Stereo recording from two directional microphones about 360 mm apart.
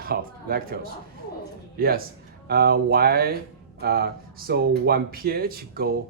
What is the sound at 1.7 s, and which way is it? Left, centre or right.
Speech, right.